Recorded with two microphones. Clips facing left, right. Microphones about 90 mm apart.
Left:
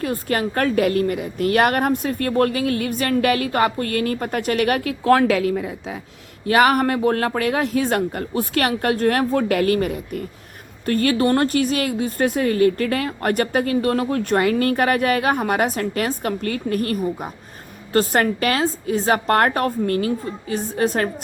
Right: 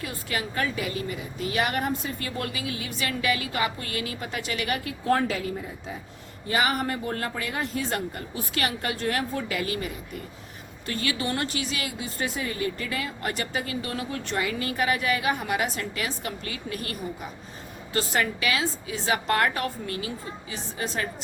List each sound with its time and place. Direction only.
0.0 s a woman's voice: 45° left (ahead or behind); by 6.0 s 90° left
6.5 s a woman's voice: 60° left (ahead or behind)